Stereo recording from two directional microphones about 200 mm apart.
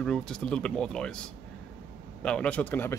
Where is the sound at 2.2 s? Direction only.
5° left (ahead or behind).